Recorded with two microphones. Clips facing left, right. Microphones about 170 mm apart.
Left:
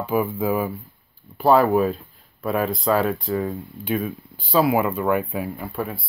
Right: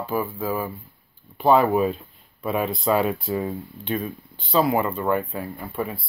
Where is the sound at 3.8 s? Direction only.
5° left (ahead or behind).